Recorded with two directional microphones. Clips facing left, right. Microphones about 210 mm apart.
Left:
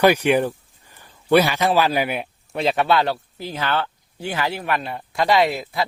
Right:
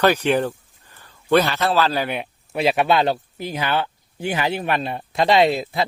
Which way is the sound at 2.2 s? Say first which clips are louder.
Right 2 dB; 10° right (ahead or behind).